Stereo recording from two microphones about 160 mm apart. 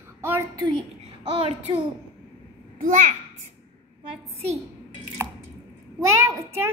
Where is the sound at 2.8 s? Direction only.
55° right (ahead or behind).